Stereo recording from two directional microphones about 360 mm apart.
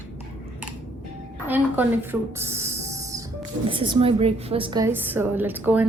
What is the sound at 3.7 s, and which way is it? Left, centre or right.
A woman's voice, centre.